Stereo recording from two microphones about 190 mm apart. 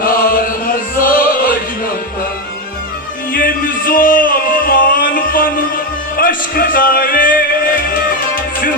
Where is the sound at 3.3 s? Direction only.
50° left (ahead or behind).